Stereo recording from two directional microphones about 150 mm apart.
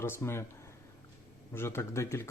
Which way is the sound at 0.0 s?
15° left (ahead or behind).